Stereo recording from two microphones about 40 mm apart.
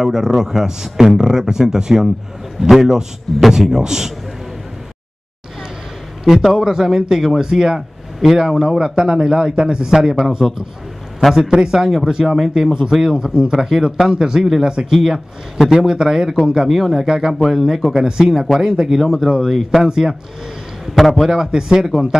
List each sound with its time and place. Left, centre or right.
0.0 s speech: centre
6.2 s speech: centre
17.9 s a man's voice: centre
21.3 s speech: centre